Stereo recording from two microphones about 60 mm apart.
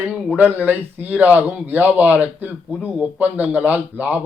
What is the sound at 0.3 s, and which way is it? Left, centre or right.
Speech, right.